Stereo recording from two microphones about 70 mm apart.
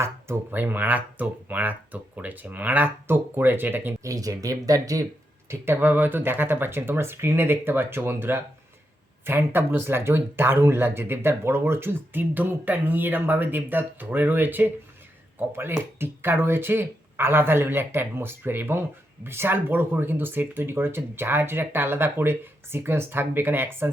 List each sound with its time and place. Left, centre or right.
0.5 s speech: right
4.0 s speech: right
5.5 s speech: right